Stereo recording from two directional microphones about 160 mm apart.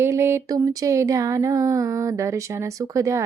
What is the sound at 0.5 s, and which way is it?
Speech, 25° right (ahead or behind).